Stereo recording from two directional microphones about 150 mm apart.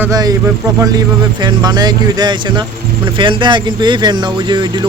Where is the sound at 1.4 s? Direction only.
25° right (ahead or behind).